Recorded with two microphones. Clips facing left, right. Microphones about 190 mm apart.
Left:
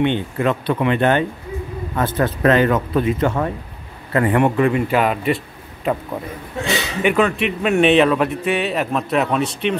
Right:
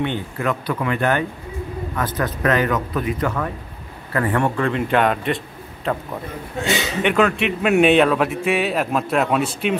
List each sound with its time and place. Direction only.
0.0 s a man's voice: 25° left (ahead or behind); by 9.8 s 5° right (ahead or behind)